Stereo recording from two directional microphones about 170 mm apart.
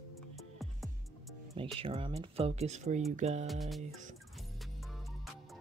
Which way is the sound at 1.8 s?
30° right (ahead or behind).